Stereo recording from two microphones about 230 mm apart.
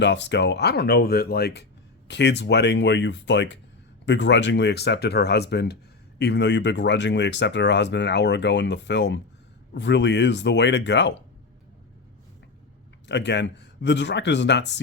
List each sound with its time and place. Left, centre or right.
0.0 s speech: left
13.1 s speech: left